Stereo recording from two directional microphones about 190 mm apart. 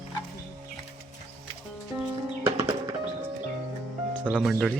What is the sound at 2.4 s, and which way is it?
Music, 15° right (ahead or behind).